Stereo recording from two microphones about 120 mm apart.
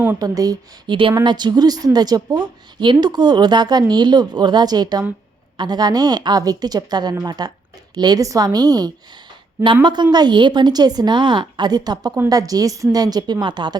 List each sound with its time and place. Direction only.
0.2 s speech: 30° right (ahead or behind)